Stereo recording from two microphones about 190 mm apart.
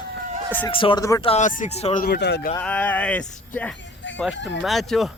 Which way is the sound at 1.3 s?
40° left (ahead or behind).